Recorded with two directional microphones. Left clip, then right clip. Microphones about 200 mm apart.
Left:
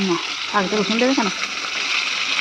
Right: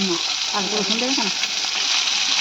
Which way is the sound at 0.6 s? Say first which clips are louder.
Left 4 dB; 25° left (ahead or behind).